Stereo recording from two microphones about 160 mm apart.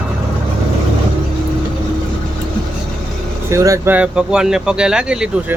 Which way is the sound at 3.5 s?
20° right (ahead or behind).